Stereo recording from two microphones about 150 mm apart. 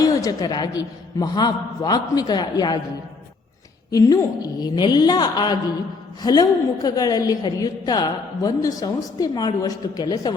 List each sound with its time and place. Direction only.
0.0 s a woman's voice: 25° left (ahead or behind)
3.9 s a woman's voice: 25° left (ahead or behind)